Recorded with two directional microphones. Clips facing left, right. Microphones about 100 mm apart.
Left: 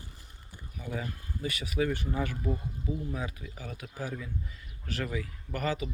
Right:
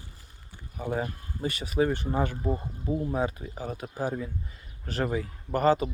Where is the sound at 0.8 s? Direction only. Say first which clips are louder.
Right 7 dB; 45° right (ahead or behind).